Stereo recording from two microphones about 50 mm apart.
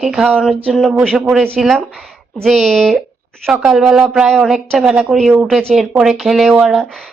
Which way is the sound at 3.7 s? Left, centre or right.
Centre.